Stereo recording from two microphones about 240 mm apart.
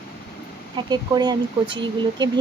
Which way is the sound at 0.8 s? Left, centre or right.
Centre.